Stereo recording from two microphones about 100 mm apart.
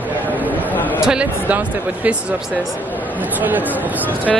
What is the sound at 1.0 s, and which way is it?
Speech, 10° right (ahead or behind).